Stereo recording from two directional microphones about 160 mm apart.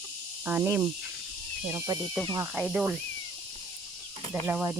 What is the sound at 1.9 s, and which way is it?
Speech, 25° right (ahead or behind).